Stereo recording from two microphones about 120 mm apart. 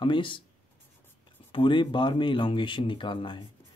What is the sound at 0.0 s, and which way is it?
Speech, 45° left (ahead or behind).